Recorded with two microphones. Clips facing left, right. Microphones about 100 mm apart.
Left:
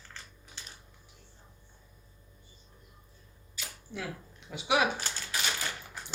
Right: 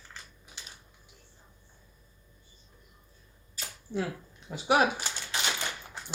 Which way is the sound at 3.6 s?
35° right (ahead or behind).